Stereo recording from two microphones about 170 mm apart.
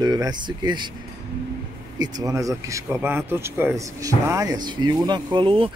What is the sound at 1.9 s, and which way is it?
Speech, 25° right (ahead or behind).